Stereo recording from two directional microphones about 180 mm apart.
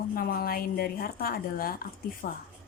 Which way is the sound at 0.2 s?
55° left (ahead or behind).